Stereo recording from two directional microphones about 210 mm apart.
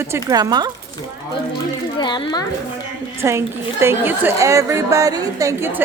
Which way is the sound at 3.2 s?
10° right (ahead or behind).